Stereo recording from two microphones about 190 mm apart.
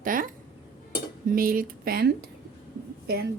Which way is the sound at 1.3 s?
50° right (ahead or behind).